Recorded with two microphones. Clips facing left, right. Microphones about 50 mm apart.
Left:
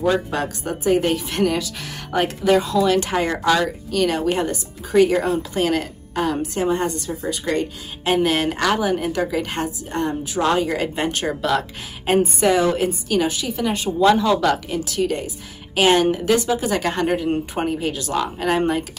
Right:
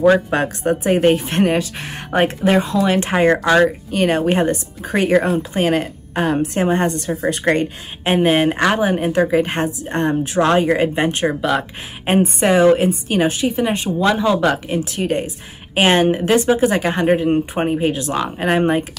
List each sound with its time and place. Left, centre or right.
0.0 s a woman's voice: right
8.0 s a woman's voice: right
10.8 s speech: right
12.1 s a woman's voice: right
16.8 s speech: right